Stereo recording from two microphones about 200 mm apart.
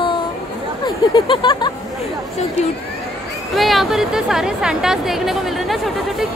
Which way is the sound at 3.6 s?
Centre (ahead or behind).